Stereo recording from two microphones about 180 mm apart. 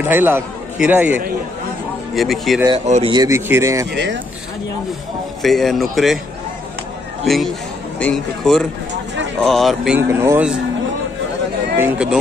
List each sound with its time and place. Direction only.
0.0 s a man's voice: 10° right (ahead or behind)
2.1 s a man's voice: centre (ahead or behind)
2.8 s speech: 40° right (ahead or behind)
3.1 s speech: 20° right (ahead or behind)
3.9 s speech: 75° right (ahead or behind)
5.4 s a man's voice: centre (ahead or behind)
8.0 s a man's voice: centre (ahead or behind)
9.9 s speech: 15° right (ahead or behind)
11.8 s a man's voice: 5° right (ahead or behind)